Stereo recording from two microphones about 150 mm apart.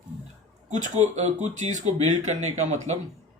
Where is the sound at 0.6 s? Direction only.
55° right (ahead or behind).